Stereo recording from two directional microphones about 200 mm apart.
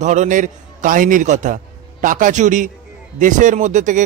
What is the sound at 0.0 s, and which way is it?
A man's voice, 35° right (ahead or behind).